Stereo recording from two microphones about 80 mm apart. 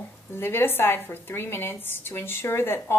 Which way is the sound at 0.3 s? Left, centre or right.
Left.